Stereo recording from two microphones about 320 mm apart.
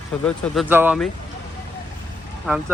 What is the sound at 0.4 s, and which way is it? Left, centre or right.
Speech, centre.